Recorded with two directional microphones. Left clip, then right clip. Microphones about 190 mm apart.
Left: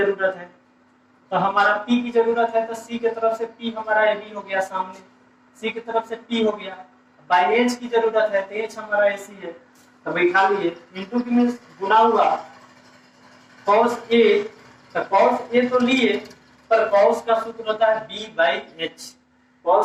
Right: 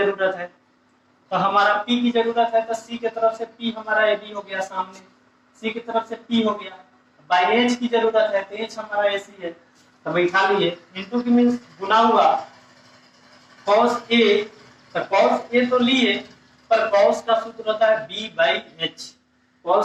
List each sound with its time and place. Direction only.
0.0 s a man's voice: 20° right (ahead or behind)
13.7 s a man's voice: 25° right (ahead or behind)